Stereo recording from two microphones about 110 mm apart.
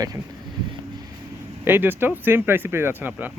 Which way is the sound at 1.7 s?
20° right (ahead or behind).